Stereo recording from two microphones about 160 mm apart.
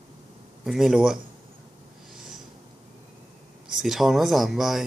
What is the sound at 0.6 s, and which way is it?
Speech, 5° right (ahead or behind).